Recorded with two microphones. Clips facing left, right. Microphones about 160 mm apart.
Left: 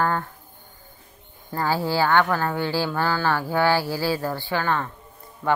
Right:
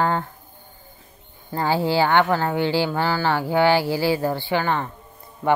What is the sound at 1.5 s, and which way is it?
Speech, 20° right (ahead or behind).